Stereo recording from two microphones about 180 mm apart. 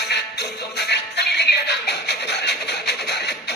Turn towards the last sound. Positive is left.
turn(degrees=65)  # may be behind; listen again after turning